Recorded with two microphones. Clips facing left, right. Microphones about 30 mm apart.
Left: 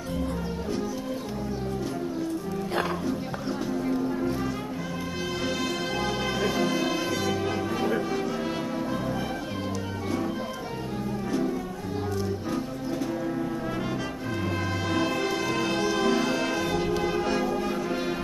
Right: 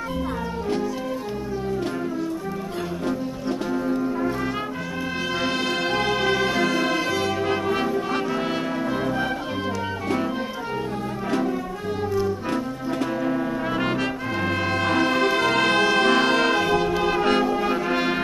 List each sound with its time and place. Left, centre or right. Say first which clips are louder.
5.4 s music: right 5 dB; right
14.4 s music: right 7 dB; right
16.5 s music: right 6 dB; right
17.4 s brass instrument: right 5 dB; right
17.6 s brass instrument: right 6 dB; right